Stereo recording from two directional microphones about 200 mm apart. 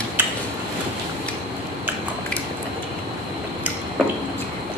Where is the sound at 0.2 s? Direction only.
10° right (ahead or behind).